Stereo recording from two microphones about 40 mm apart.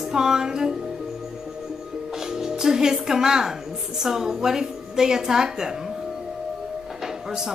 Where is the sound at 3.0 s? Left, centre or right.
Centre.